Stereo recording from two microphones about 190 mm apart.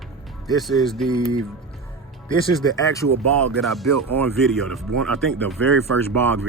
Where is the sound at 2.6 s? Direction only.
15° left (ahead or behind).